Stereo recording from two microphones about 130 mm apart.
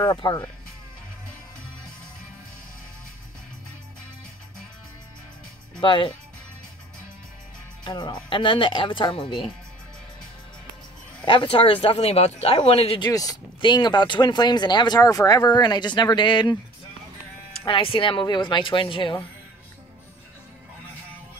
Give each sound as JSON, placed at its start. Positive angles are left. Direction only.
{"t": 0.0, "sound": "speech", "side_deg": 30}
{"t": 5.8, "sound": "speech", "side_deg": 40}
{"t": 7.8, "sound": "speech", "side_deg": 35}
{"t": 11.2, "sound": "speech", "side_deg": 40}
{"t": 13.0, "sound": "speech", "side_deg": 30}
{"t": 17.5, "sound": "speech", "side_deg": 45}